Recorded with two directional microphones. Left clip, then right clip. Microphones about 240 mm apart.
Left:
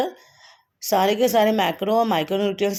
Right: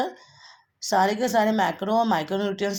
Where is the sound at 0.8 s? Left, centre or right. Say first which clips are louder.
Left 3 dB; left.